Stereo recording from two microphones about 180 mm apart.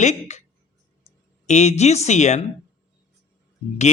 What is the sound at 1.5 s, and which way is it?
Speech, 40° left (ahead or behind).